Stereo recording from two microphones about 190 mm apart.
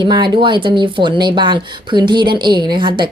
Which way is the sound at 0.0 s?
25° right (ahead or behind).